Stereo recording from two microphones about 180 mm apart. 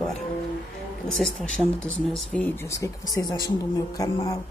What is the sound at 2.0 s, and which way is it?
Speech, 5° left (ahead or behind).